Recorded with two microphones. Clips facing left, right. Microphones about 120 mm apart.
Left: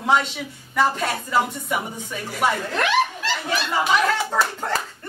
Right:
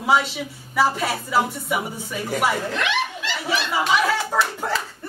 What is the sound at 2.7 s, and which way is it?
Chuckle, 40° left (ahead or behind).